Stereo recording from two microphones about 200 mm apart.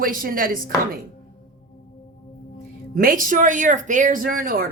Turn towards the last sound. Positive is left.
turn(degrees=-45)  # may be behind; listen again after turning